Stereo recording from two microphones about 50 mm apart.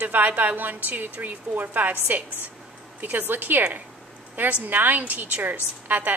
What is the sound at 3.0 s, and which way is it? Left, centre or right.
A woman's voice, right.